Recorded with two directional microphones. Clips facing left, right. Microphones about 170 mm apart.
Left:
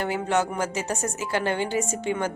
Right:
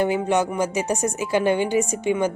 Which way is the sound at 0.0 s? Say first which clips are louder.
Right 4 dB; 15° right (ahead or behind).